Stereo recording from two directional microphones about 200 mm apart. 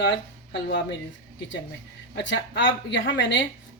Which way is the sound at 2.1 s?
60° left (ahead or behind).